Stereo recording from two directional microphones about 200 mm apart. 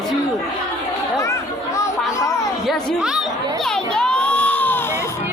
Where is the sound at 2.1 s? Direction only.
15° left (ahead or behind).